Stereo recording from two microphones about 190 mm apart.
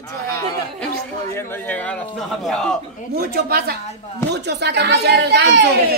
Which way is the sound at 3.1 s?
55° right (ahead or behind).